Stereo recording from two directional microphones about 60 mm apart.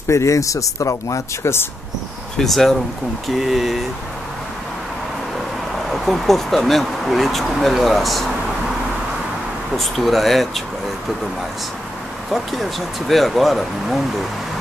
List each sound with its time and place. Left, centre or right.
0.1 s speech: left
2.3 s speech: centre
5.9 s speech: centre
9.8 s speech: centre
13.1 s speech: centre